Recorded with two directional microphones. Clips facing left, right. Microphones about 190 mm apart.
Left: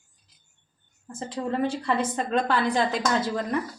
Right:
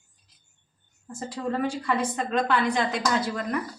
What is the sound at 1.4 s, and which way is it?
A woman's voice, 25° left (ahead or behind).